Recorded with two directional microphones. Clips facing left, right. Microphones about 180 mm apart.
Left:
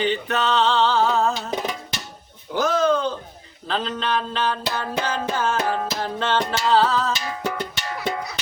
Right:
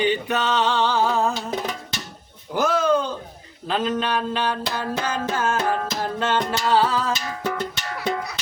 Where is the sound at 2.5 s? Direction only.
10° right (ahead or behind).